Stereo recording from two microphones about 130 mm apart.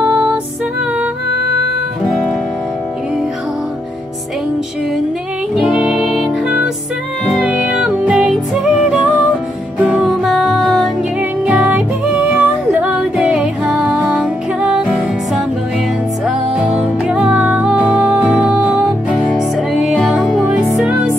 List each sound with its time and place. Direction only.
0.0 s music: 15° right (ahead or behind)
5.6 s music: 10° right (ahead or behind)